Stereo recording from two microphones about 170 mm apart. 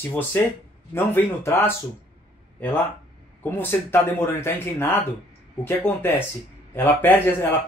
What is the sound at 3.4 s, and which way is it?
Speech, 10° left (ahead or behind).